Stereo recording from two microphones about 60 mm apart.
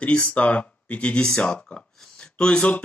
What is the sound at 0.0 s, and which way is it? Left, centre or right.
Speech, left.